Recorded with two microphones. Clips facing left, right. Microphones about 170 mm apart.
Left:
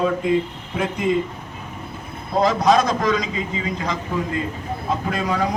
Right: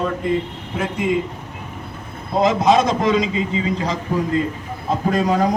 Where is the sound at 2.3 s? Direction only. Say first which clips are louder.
Right 1 dB; 20° right (ahead or behind).